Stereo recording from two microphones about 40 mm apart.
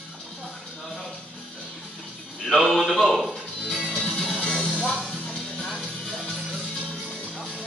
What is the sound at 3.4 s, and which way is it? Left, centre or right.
Music, centre.